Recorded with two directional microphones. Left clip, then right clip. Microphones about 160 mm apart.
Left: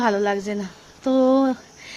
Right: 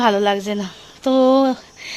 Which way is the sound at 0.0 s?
10° right (ahead or behind).